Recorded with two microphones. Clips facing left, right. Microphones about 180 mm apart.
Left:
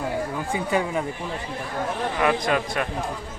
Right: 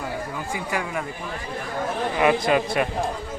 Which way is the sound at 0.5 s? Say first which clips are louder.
Left 4 dB; 25° left (ahead or behind).